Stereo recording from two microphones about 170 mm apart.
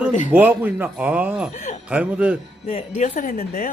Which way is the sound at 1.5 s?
40° left (ahead or behind).